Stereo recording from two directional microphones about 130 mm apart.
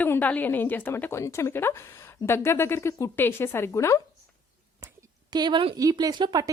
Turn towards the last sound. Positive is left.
turn(degrees=-35)  # may be behind; listen again after turning